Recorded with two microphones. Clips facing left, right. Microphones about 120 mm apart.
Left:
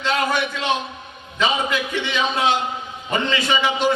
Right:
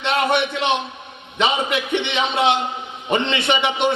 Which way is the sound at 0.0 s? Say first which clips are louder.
Right 2 dB; 25° right (ahead or behind).